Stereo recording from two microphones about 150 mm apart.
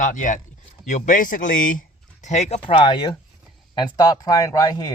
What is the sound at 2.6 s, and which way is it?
Speech, 35° left (ahead or behind).